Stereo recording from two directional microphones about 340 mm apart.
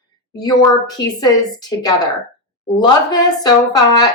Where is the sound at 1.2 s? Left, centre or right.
Centre.